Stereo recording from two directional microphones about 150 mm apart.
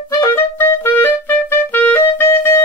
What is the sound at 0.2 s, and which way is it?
Clarinet, 15° left (ahead or behind).